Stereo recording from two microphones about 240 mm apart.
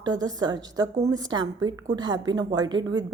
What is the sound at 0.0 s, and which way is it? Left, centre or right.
A woman's voice, centre.